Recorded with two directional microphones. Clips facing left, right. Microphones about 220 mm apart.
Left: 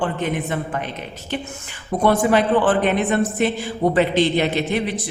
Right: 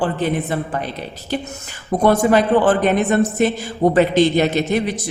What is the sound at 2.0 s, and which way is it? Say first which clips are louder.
A man's voice: right 2 dB; 40° right (ahead or behind).